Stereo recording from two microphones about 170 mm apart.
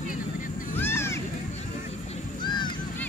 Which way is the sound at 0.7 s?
15° left (ahead or behind).